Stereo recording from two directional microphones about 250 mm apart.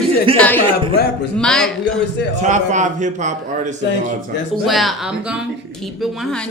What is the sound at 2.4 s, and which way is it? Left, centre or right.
A man's voice, right.